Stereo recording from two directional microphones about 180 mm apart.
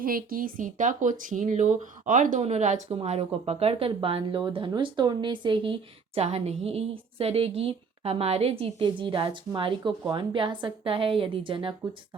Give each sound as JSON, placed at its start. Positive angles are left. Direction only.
{"t": 0.0, "sound": "speech", "side_deg": -55}